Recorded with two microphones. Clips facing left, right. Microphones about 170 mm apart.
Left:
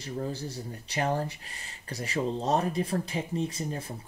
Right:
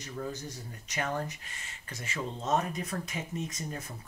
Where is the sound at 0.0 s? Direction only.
35° left (ahead or behind).